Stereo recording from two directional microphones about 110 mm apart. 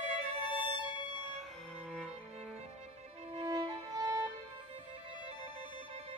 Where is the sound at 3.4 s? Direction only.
35° right (ahead or behind).